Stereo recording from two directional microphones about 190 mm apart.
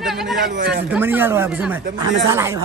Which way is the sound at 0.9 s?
10° right (ahead or behind).